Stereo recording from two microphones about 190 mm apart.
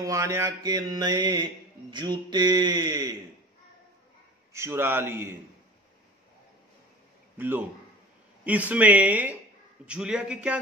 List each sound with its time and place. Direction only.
0.0 s music: 15° right (ahead or behind)
4.5 s a man's voice: 15° right (ahead or behind)
7.3 s a man's voice: 10° right (ahead or behind)